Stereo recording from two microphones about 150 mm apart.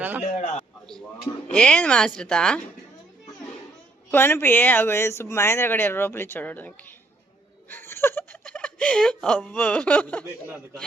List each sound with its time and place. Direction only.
0.2 s a man's voice: 50° left (ahead or behind)
1.5 s speech: 5° left (ahead or behind)
4.1 s speech: 15° left (ahead or behind)
10.4 s speech: 10° right (ahead or behind)